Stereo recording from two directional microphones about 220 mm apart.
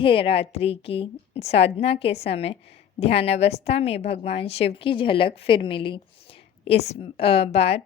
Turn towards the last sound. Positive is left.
turn(degrees=30)  # may be behind; listen again after turning